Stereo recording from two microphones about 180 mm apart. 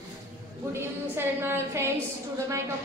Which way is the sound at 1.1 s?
10° right (ahead or behind).